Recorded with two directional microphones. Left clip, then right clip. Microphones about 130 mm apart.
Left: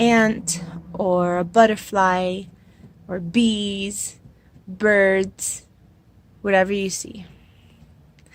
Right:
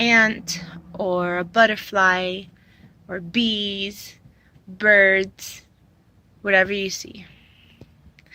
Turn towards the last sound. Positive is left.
turn(degrees=40)  # may be behind; listen again after turning